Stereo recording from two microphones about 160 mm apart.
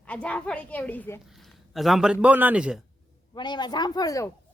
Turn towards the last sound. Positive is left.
turn(degrees=20)  # may be behind; listen again after turning